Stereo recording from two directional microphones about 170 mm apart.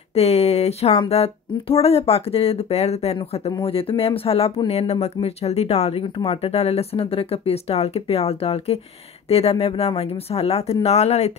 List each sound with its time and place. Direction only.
0.1 s speech: 40° left (ahead or behind)